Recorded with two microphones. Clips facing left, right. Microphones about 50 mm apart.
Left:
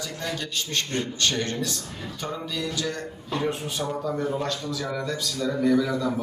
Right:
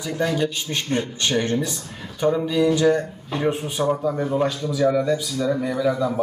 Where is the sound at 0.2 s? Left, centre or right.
Centre.